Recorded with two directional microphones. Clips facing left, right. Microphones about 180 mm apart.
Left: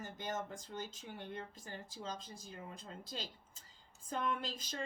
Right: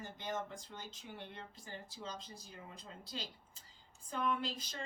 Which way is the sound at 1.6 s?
45° left (ahead or behind).